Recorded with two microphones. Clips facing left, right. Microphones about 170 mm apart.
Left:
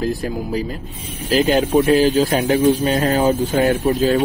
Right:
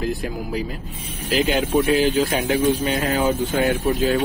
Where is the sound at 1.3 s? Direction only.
40° left (ahead or behind).